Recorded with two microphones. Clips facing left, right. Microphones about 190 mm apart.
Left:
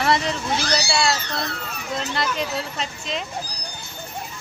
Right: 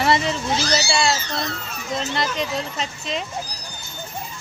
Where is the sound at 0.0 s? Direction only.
Centre (ahead or behind).